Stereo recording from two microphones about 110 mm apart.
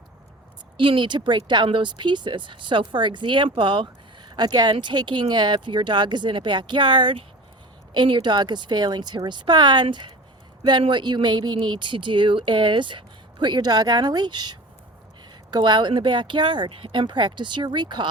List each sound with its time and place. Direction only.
0.8 s speech: 50° right (ahead or behind)